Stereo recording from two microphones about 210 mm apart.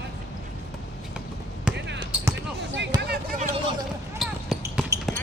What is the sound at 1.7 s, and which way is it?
Basketball bounce, 5° right (ahead or behind).